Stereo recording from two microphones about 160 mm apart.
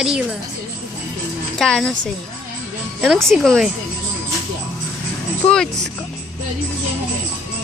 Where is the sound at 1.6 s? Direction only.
5° left (ahead or behind).